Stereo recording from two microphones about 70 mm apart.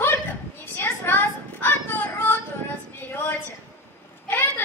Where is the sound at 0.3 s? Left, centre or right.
Left.